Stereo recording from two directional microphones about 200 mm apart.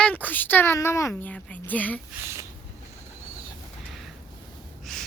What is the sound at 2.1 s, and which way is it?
Speech, 10° right (ahead or behind).